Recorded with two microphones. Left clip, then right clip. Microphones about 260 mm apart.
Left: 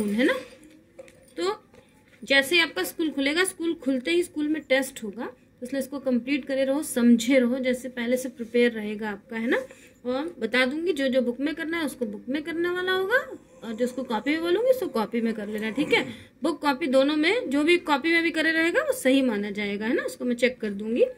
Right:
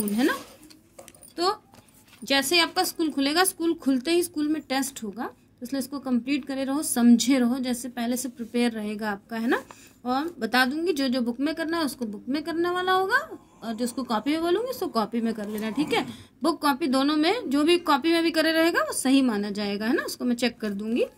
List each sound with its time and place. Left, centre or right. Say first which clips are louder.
2.2 s speech: left 1 dB; right